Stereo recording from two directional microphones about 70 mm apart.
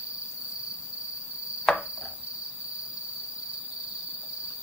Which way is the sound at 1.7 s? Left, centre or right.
Centre.